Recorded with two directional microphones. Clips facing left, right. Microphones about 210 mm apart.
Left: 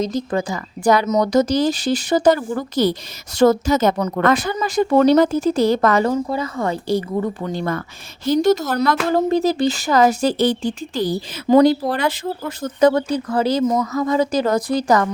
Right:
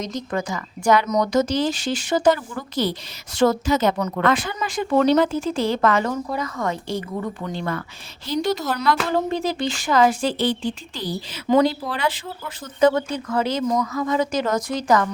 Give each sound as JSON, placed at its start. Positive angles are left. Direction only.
{"t": 0.0, "sound": "speech", "side_deg": 30}